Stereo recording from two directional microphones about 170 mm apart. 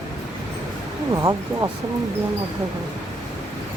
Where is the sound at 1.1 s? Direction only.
20° right (ahead or behind).